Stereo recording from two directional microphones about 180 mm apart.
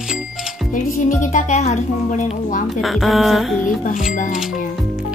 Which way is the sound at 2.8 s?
Centre (ahead or behind).